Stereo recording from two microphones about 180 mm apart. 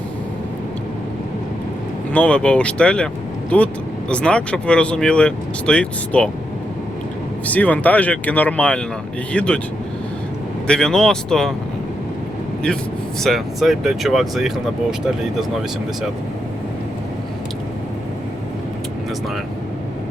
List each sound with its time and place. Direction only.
2.1 s speech: 5° left (ahead or behind)
7.4 s speech: 10° left (ahead or behind)
10.7 s speech: 5° left (ahead or behind)
13.2 s speech: centre (ahead or behind)